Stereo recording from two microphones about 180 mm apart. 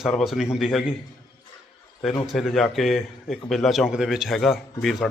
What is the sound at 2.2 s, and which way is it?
A man's voice, centre (ahead or behind).